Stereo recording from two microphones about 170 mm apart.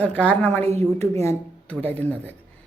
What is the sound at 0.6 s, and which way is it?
Speech, 40° right (ahead or behind).